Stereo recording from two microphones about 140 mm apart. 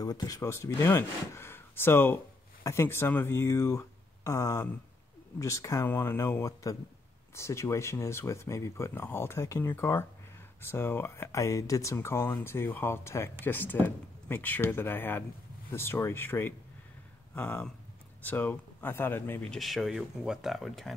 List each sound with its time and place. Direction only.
0.0 s speech: 25° left (ahead or behind)
19.5 s speech: centre (ahead or behind)